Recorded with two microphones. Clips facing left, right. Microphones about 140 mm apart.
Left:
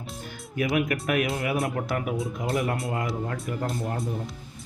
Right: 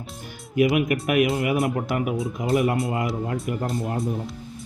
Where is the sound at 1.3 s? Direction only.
Centre (ahead or behind).